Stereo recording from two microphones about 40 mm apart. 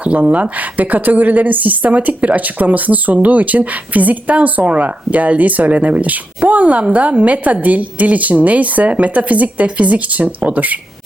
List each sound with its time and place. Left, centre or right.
0.2 s a woman's voice: right